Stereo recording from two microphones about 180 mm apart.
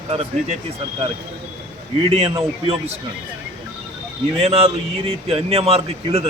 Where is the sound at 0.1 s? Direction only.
35° right (ahead or behind).